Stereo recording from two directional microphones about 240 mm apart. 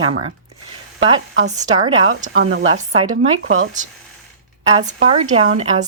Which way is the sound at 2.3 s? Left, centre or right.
Right.